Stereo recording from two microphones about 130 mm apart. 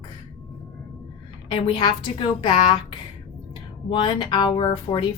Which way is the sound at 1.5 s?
40° left (ahead or behind).